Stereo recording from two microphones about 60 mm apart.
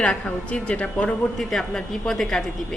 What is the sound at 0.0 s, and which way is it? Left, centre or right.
A woman's voice, centre.